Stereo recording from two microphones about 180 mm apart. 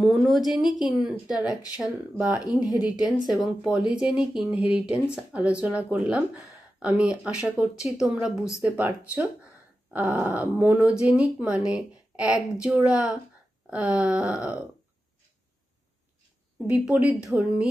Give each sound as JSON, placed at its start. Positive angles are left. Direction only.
{"t": 0.0, "sound": "speech", "side_deg": 0}
{"t": 16.6, "sound": "speech", "side_deg": -5}